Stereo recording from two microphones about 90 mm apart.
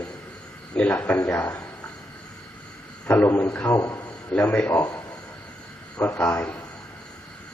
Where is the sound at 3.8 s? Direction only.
40° left (ahead or behind).